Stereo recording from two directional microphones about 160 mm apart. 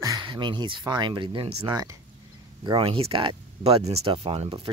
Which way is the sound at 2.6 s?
35° right (ahead or behind).